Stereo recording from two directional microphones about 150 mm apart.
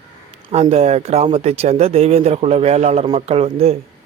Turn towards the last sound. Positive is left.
turn(degrees=-40)  # may be behind; listen again after turning